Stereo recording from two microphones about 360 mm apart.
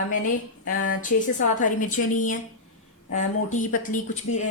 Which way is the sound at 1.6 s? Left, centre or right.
Left.